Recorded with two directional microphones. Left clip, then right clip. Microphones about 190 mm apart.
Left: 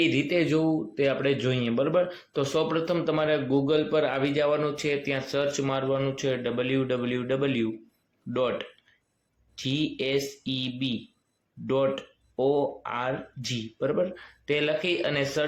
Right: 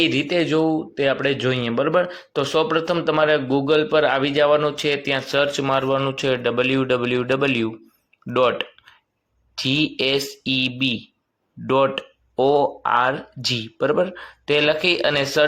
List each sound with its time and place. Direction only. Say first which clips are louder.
0.0 s speech: right 5 dB; 15° right (ahead or behind)